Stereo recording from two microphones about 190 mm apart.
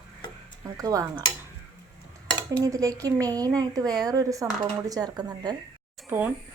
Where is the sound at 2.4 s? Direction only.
20° right (ahead or behind).